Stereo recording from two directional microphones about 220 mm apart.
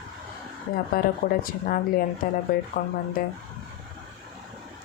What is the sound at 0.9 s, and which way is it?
Speech, 40° left (ahead or behind).